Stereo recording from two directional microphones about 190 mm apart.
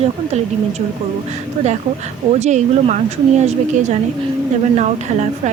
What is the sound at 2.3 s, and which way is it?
Speech, 35° right (ahead or behind).